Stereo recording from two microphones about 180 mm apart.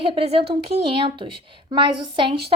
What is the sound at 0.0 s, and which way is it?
A woman's voice, 30° right (ahead or behind).